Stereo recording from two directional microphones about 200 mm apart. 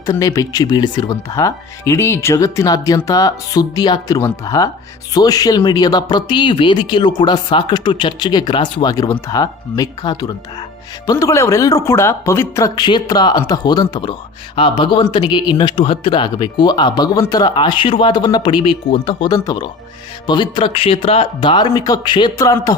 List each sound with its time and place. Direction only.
0.0 s speech: 15° left (ahead or behind)